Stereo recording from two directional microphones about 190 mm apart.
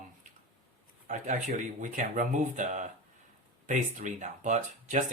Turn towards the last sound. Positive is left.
turn(degrees=-40)  # may be behind; listen again after turning